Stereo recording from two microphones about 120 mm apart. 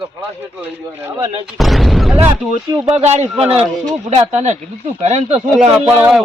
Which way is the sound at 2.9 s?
60° right (ahead or behind).